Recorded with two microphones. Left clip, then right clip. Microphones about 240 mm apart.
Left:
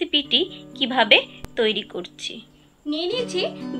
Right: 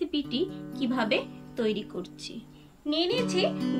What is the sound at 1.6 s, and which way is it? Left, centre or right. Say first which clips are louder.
Speech: left 8 dB; centre.